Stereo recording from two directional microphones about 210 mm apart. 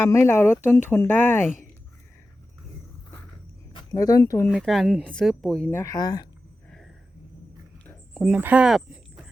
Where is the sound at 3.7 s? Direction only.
20° left (ahead or behind).